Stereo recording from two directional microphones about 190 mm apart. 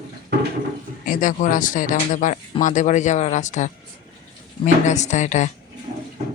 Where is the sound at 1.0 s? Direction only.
45° left (ahead or behind).